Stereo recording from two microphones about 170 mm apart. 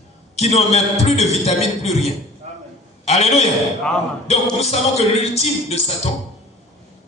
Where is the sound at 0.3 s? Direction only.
40° left (ahead or behind).